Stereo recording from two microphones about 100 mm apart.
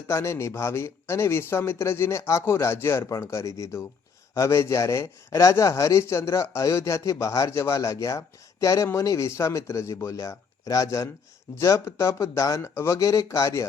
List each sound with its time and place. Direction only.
0.1 s speech: 30° left (ahead or behind)